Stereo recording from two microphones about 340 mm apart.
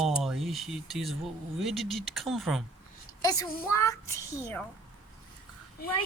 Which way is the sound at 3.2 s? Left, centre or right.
Centre.